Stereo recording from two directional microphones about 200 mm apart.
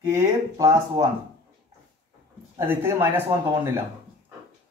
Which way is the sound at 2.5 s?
10° right (ahead or behind).